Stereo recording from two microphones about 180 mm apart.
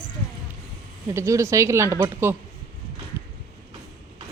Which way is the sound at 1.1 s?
15° right (ahead or behind).